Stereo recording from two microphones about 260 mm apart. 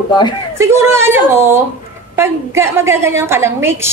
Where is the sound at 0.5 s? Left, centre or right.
Centre.